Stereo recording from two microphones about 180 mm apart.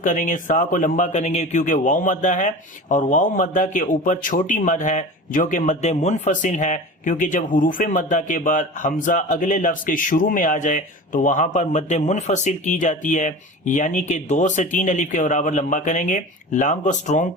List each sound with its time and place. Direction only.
0.0 s a man's voice: 45° left (ahead or behind)